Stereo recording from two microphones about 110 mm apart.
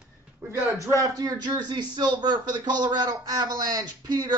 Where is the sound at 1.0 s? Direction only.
35° right (ahead or behind).